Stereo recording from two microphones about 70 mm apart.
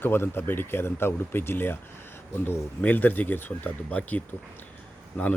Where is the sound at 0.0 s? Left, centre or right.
Left.